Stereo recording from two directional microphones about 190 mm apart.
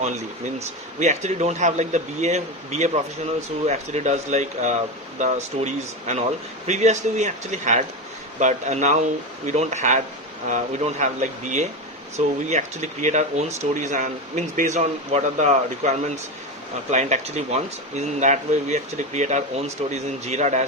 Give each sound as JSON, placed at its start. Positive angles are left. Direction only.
{"t": 0.9, "sound": "speech", "side_deg": -35}